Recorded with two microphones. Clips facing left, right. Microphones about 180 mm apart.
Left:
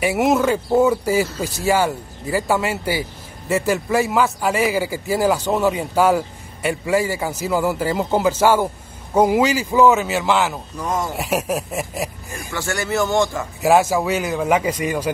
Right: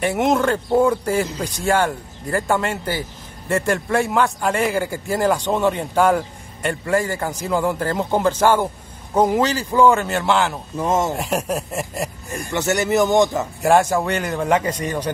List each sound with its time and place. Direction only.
0.0 s speech: 5° left (ahead or behind)
10.8 s speech: 25° right (ahead or behind)
11.1 s speech: 5° left (ahead or behind)
12.5 s speech: 20° right (ahead or behind)
13.6 s speech: 5° left (ahead or behind)